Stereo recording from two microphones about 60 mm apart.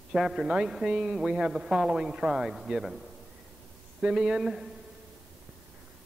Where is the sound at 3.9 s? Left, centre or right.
Centre.